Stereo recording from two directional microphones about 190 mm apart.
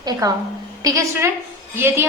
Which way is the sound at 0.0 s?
20° right (ahead or behind).